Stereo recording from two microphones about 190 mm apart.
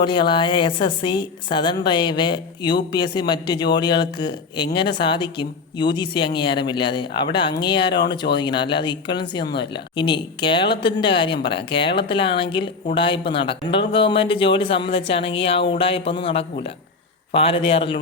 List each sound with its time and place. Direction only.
0.0 s speech: 25° left (ahead or behind)